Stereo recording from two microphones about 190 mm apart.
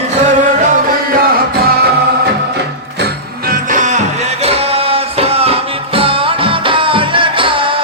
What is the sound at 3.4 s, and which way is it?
Music, 45° right (ahead or behind).